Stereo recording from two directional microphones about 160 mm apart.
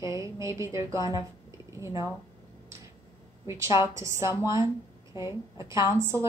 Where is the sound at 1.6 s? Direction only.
20° right (ahead or behind).